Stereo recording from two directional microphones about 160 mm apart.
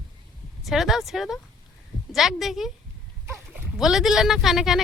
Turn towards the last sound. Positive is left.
turn(degrees=0)  # may be behind; listen again after turning